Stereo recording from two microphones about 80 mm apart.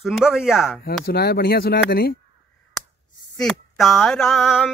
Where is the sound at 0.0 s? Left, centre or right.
Centre.